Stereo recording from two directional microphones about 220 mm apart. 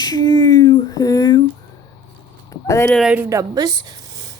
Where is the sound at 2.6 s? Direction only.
10° left (ahead or behind).